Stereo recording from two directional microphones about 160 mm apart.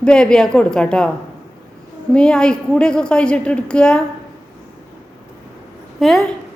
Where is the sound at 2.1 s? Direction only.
5° left (ahead or behind).